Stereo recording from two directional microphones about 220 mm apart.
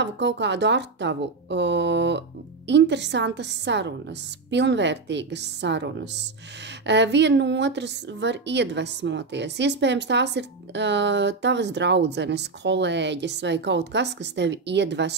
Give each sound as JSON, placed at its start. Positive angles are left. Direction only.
{"t": 0.0, "sound": "a woman's voice", "side_deg": -50}